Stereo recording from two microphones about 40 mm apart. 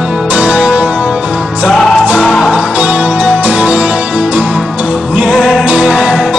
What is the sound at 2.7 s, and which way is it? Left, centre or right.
Music, right.